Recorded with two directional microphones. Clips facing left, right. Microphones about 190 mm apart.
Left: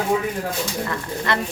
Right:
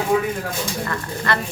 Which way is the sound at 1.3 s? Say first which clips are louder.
Even; 20° left (ahead or behind).